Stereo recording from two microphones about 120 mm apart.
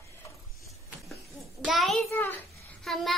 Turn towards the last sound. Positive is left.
turn(degrees=0)  # may be behind; listen again after turning